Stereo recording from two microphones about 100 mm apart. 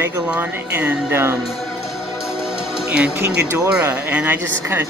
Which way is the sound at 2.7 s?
10° right (ahead or behind).